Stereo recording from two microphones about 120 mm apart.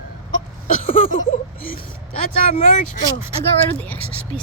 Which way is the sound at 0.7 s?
90° left.